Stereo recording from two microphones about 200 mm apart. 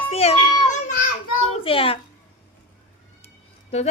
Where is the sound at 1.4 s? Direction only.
30° left (ahead or behind).